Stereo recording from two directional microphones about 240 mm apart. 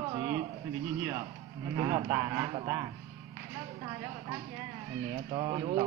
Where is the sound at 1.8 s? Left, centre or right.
Centre.